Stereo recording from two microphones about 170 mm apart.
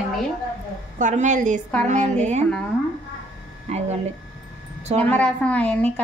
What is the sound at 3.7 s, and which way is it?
A woman's voice, 40° right (ahead or behind).